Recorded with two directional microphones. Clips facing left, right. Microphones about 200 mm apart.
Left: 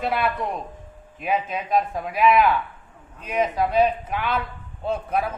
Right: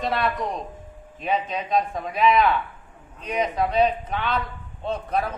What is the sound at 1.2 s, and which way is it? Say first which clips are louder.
Speech: even; 5° left (ahead or behind).